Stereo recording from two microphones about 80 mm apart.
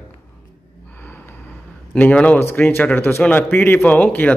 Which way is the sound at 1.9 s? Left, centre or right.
Centre.